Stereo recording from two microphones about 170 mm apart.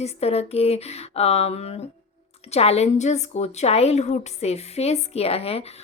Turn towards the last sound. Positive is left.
turn(degrees=35)  # may be behind; listen again after turning